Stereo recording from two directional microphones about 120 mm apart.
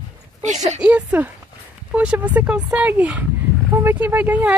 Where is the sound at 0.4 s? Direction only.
75° right (ahead or behind).